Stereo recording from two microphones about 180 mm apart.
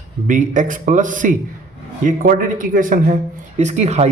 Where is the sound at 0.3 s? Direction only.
45° right (ahead or behind).